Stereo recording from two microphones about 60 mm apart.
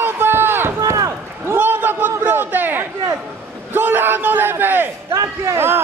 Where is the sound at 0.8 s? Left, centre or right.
Right.